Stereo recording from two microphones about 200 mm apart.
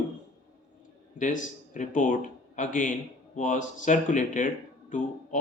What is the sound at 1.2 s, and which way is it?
Speech, 40° left (ahead or behind).